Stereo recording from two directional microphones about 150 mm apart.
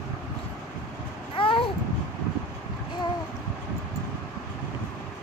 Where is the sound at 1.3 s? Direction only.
35° left (ahead or behind).